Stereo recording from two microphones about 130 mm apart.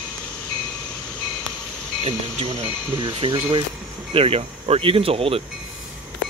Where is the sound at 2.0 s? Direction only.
50° right (ahead or behind).